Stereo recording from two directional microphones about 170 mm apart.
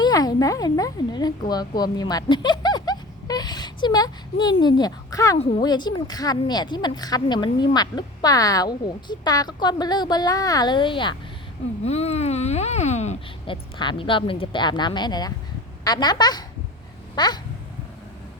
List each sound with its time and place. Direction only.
0.0 s speech: 20° left (ahead or behind)
5.4 s speech: 35° left (ahead or behind)
5.6 s speech: 25° left (ahead or behind)
11.8 s speech: 40° left (ahead or behind)
13.7 s speech: 30° left (ahead or behind)